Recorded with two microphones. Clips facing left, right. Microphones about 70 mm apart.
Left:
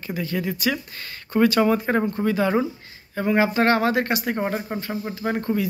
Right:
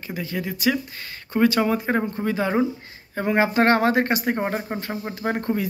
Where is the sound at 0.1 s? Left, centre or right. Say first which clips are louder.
Left 2 dB; centre.